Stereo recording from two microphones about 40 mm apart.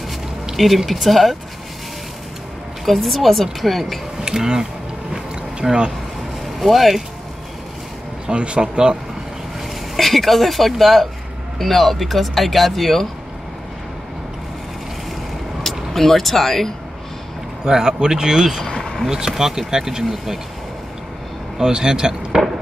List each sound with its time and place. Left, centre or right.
0.6 s speech: centre
2.8 s speech: centre
4.2 s speech: centre
5.1 s a sound: centre
6.6 s speech: centre
8.3 s speech: right
9.9 s speech: centre
15.6 s speech: centre
17.6 s speech: centre
18.8 s a sound: centre
19.0 s speech: centre
21.5 s speech: centre